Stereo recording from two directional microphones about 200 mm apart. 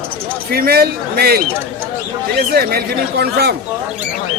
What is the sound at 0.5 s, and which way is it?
Speech, 50° right (ahead or behind).